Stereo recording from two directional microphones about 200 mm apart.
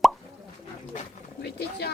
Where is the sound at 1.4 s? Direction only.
55° left (ahead or behind).